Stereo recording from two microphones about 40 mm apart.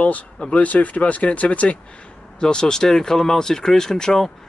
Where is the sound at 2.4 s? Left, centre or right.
Centre.